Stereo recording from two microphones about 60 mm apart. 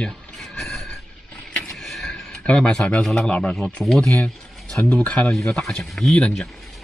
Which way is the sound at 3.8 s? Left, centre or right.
Centre.